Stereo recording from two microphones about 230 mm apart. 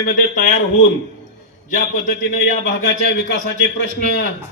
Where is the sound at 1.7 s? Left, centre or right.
Left.